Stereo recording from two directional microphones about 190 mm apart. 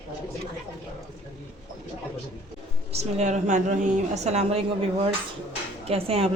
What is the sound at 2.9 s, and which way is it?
A woman's voice, 35° right (ahead or behind).